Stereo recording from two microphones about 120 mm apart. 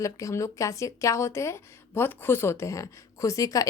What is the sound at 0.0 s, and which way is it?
Speech, 25° left (ahead or behind).